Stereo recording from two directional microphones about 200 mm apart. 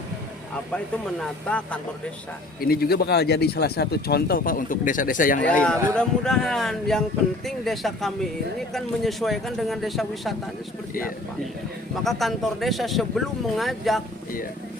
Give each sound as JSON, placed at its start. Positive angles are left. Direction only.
{"t": 0.5, "sound": "speech", "side_deg": 5}
{"t": 2.6, "sound": "speech", "side_deg": 50}
{"t": 5.5, "sound": "speech", "side_deg": 5}
{"t": 12.0, "sound": "speech", "side_deg": 0}